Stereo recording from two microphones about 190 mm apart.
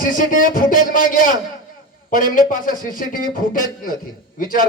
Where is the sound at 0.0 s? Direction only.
45° left (ahead or behind).